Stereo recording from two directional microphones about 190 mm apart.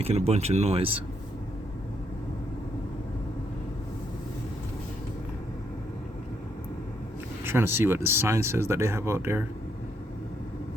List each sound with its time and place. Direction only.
0.0 s speech: 35° right (ahead or behind)
7.4 s speech: 10° right (ahead or behind)